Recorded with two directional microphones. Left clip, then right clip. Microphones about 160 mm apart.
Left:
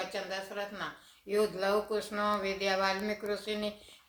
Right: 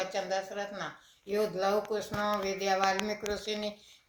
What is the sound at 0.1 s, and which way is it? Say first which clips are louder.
Speech: right 4 dB; 15° left (ahead or behind).